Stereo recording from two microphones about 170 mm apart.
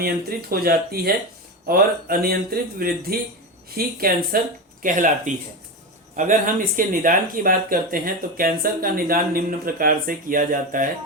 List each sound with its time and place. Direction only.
0.0 s speech: 65° right (ahead or behind)